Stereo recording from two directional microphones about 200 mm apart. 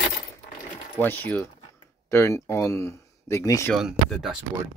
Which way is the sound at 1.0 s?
10° left (ahead or behind).